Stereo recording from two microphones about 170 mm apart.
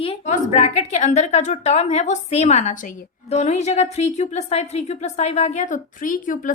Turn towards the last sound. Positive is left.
turn(degrees=50)  # may be behind; listen again after turning